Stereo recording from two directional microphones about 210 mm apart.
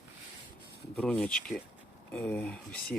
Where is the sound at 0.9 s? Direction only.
5° left (ahead or behind).